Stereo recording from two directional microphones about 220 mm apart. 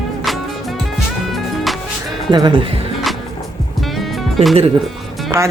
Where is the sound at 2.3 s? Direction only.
20° right (ahead or behind).